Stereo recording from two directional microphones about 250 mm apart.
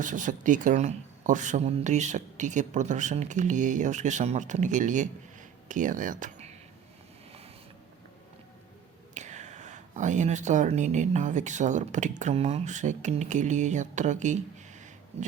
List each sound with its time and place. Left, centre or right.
0.0 s speech: right
9.1 s speech: right